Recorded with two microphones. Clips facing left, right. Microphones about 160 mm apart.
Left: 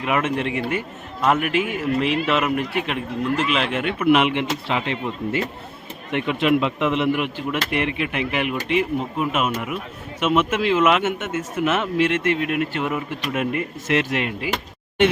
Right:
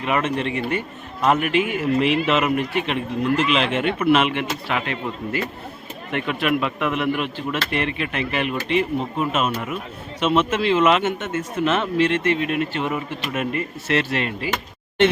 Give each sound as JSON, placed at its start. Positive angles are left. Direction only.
{"t": 0.0, "sound": "a man's voice", "side_deg": 10}
{"t": 4.1, "sound": "a man's voice", "side_deg": 15}